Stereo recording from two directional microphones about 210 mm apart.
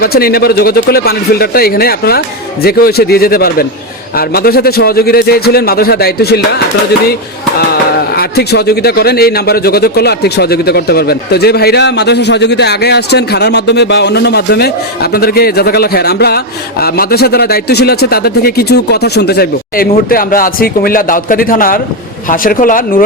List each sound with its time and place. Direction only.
0.0 s speech: 45° left (ahead or behind)
7.6 s speech: 45° left (ahead or behind)